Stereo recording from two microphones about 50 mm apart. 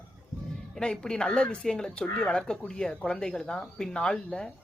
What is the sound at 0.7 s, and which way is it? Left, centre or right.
Speech, centre.